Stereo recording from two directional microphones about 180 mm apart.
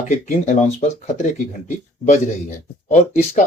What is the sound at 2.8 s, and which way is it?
Speech, 40° left (ahead or behind).